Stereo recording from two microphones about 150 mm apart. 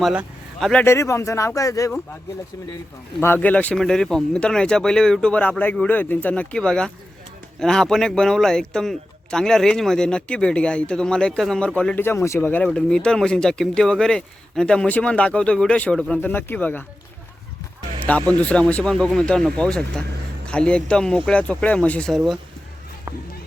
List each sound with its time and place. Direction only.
0.0 s a sound: 5° right (ahead or behind)
0.7 s speech: 15° left (ahead or behind)
3.2 s a man's voice: 15° left (ahead or behind)
18.0 s a man's voice: 10° left (ahead or behind)